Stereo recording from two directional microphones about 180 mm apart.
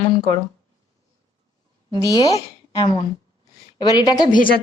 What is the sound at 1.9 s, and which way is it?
Speech, 20° left (ahead or behind).